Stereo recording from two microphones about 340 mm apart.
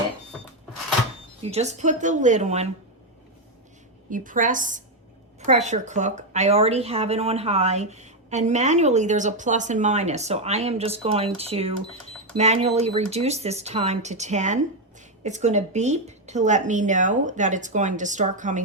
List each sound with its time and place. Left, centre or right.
1.4 s speech: centre
4.1 s speech: right